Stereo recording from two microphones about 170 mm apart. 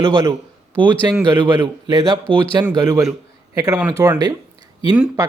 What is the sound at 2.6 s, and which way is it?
Speech, 20° right (ahead or behind).